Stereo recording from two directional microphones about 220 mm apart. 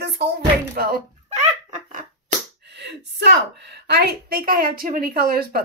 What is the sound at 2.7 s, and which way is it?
Speech, 50° right (ahead or behind).